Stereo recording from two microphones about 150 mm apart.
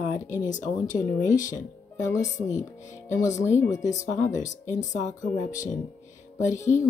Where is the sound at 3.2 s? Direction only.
55° left (ahead or behind).